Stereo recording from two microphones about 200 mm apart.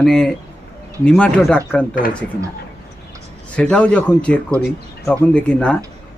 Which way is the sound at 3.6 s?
5° left (ahead or behind).